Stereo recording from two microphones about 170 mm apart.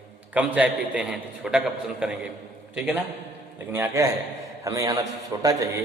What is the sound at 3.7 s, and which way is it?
A man's voice, 15° right (ahead or behind).